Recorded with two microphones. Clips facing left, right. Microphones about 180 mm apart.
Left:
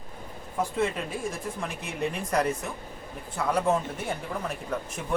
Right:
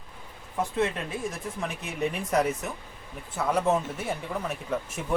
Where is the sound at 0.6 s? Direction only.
Centre (ahead or behind).